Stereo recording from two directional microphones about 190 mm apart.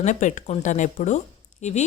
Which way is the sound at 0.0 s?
40° left (ahead or behind).